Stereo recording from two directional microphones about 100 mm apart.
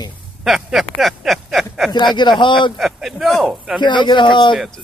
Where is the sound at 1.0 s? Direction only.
Centre (ahead or behind).